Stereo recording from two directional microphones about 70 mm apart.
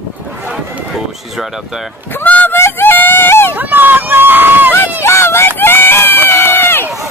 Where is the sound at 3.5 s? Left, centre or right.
Right.